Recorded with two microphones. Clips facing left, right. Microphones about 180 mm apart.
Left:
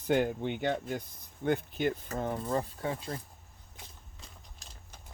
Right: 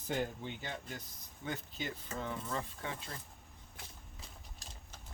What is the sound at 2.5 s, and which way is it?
Speech, 35° left (ahead or behind).